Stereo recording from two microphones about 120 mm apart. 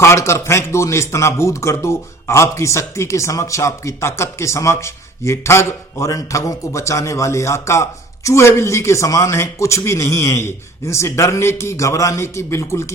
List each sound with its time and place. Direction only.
0.0 s a man's voice: 25° left (ahead or behind)